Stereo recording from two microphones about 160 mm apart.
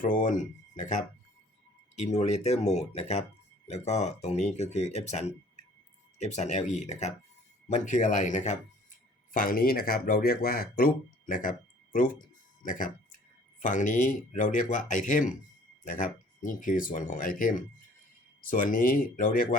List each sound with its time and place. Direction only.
0.0 s speech: 55° left (ahead or behind)
9.3 s speech: 60° left (ahead or behind)